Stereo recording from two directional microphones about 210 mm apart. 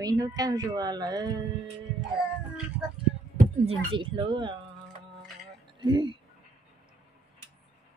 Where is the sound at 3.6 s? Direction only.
25° right (ahead or behind).